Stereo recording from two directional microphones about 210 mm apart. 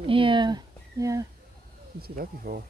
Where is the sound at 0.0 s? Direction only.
25° right (ahead or behind).